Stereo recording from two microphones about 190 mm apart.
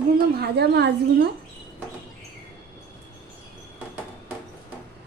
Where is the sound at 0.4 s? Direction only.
60° right (ahead or behind).